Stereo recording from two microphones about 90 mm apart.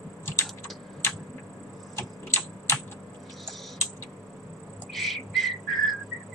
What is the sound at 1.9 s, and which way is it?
Typing, 30° left (ahead or behind).